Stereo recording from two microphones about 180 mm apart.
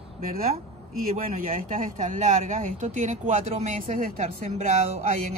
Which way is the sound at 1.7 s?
45° right (ahead or behind).